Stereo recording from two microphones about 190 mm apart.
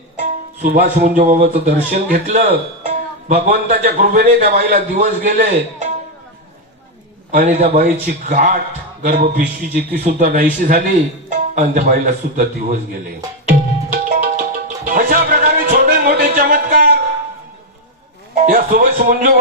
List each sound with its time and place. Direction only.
0.2 s a man's voice: 50° right (ahead or behind)
7.3 s a man's voice: 45° right (ahead or behind)
13.4 s music: 45° right (ahead or behind)
18.3 s a man's voice: 40° right (ahead or behind)